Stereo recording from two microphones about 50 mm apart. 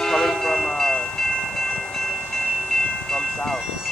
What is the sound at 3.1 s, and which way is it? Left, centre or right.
Train, centre.